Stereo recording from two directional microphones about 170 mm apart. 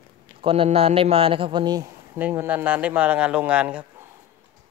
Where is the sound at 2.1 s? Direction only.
10° right (ahead or behind).